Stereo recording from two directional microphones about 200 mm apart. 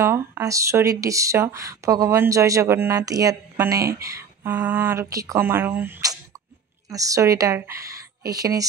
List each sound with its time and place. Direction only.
0.0 s speech: 10° right (ahead or behind)